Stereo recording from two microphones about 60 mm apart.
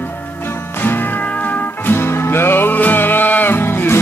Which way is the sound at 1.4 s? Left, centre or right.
Left.